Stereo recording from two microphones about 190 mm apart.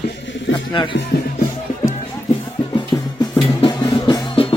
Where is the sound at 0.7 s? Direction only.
25° left (ahead or behind).